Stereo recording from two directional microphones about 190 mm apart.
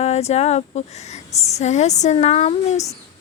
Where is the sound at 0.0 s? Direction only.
35° left (ahead or behind).